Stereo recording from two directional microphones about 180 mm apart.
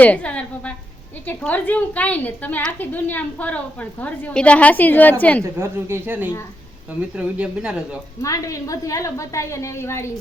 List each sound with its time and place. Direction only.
0.0 s a woman's voice: 10° left (ahead or behind)
5.4 s a woman's voice: 15° right (ahead or behind)
8.2 s a woman's voice: 20° left (ahead or behind)